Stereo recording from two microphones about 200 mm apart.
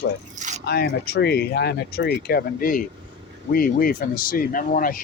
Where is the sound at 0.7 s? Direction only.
55° left (ahead or behind).